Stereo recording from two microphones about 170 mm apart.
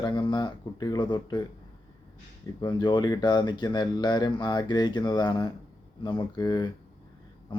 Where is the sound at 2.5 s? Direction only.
25° left (ahead or behind).